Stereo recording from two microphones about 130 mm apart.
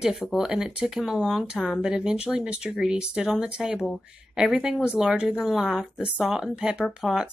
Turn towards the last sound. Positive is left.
turn(degrees=-5)  # may be behind; listen again after turning